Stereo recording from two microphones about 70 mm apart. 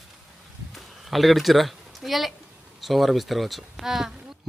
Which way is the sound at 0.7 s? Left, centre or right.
Centre.